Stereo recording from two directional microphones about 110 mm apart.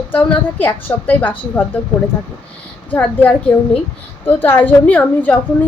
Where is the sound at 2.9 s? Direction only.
15° left (ahead or behind).